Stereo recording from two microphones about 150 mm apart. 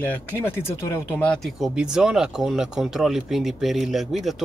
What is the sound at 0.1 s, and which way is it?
Speech, 15° left (ahead or behind).